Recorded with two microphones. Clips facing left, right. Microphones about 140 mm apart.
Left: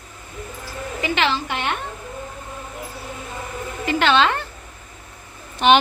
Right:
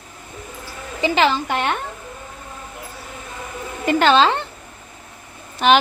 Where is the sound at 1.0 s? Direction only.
40° right (ahead or behind).